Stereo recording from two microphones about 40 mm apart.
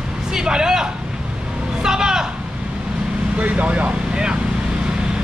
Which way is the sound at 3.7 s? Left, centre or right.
Right.